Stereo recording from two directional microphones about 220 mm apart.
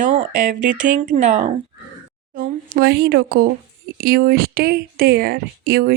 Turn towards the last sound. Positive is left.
turn(degrees=-45)  # may be behind; listen again after turning